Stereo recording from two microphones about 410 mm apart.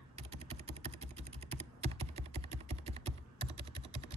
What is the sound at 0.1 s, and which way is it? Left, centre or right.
Typing, centre.